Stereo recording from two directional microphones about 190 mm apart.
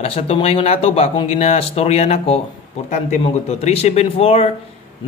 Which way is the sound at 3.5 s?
35° left (ahead or behind).